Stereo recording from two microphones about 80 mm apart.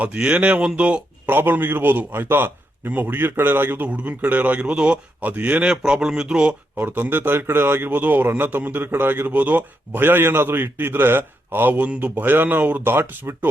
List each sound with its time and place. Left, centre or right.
0.0 s speech: centre
1.3 s a man's voice: right
5.7 s speech: centre
6.7 s a man's voice: right